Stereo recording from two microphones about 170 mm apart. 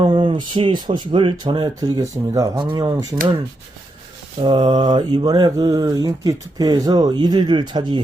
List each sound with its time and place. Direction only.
0.0 s mantra: 25° right (ahead or behind)
4.4 s mantra: 30° right (ahead or behind)